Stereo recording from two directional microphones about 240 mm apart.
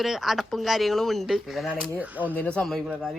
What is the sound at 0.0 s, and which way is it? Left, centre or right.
Speech, centre.